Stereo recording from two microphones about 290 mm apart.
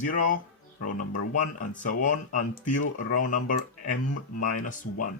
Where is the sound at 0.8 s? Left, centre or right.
Left.